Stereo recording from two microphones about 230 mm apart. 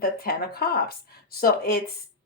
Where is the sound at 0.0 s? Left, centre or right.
Left.